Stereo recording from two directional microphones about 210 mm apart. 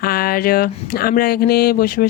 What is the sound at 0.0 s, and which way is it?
Speech, 45° left (ahead or behind).